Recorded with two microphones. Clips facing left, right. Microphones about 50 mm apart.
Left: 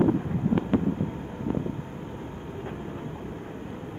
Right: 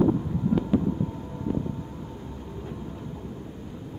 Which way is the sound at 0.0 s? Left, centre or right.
Left.